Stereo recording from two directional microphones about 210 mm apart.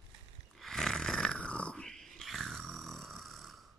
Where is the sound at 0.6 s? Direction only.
Centre (ahead or behind).